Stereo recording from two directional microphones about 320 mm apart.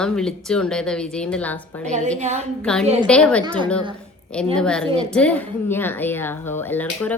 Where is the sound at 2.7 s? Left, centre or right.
Centre.